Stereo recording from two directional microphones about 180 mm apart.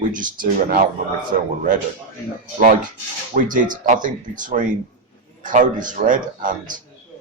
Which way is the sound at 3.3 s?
45° right (ahead or behind).